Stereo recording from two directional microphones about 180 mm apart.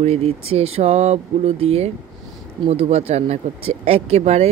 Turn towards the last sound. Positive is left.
turn(degrees=-35)  # may be behind; listen again after turning